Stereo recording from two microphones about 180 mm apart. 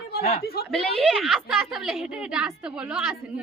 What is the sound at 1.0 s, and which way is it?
Speech, 5° right (ahead or behind).